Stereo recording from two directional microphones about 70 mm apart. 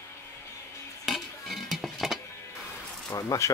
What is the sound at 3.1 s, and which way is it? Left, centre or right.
Speech, left.